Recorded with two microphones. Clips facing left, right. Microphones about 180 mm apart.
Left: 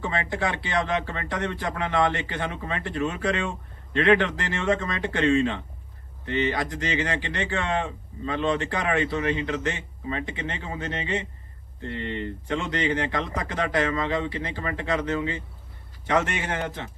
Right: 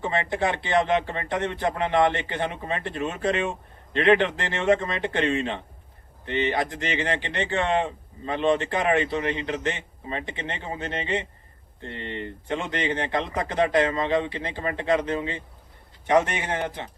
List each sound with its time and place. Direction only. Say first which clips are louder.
0.0 s speech: right 2 dB; 25° right (ahead or behind)